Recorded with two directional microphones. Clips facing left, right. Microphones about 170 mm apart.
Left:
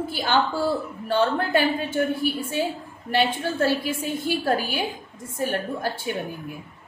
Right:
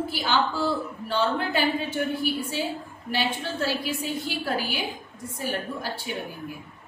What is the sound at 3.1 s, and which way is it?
A woman's voice, 55° left (ahead or behind).